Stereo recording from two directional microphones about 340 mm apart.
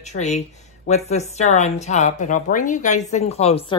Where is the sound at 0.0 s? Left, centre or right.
Centre.